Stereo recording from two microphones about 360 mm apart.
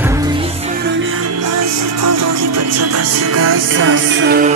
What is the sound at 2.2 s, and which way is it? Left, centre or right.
Music, right.